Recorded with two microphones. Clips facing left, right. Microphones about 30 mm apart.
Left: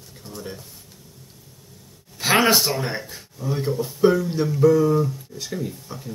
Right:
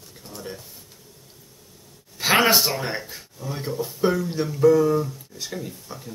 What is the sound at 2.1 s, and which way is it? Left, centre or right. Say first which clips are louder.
Speech: even; centre.